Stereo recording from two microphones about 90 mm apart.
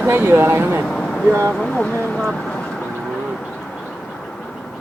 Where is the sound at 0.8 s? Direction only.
10° left (ahead or behind).